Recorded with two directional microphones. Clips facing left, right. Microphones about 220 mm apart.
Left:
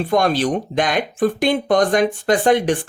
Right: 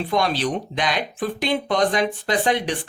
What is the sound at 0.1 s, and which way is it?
Speech, 50° left (ahead or behind).